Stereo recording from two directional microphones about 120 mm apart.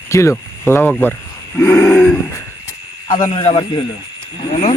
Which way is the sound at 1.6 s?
20° left (ahead or behind).